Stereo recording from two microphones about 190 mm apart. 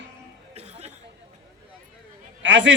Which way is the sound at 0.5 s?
35° right (ahead or behind).